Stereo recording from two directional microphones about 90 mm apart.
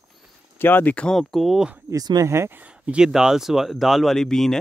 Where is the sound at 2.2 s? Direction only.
30° right (ahead or behind).